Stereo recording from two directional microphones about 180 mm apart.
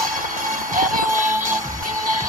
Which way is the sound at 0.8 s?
50° right (ahead or behind).